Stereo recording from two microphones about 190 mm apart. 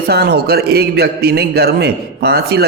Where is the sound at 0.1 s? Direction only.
60° right (ahead or behind).